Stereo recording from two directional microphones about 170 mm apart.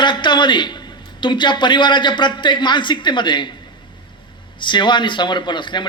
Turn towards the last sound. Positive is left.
turn(degrees=25)  # may be behind; listen again after turning